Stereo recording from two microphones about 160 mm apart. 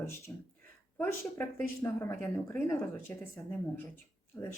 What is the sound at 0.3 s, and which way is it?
Speech, 15° left (ahead or behind).